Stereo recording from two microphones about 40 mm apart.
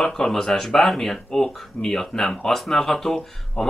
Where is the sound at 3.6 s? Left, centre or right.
Left.